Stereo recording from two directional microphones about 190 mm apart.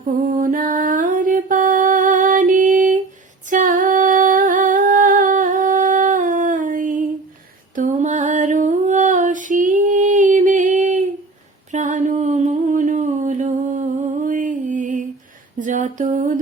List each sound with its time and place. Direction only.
0.0 s mantra: 45° right (ahead or behind)
3.5 s humming: 45° right (ahead or behind)
7.8 s female singing: 40° right (ahead or behind)
11.7 s a sound: 40° right (ahead or behind)